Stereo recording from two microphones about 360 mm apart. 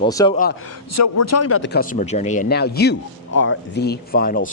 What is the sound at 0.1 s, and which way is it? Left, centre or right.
Speech, centre.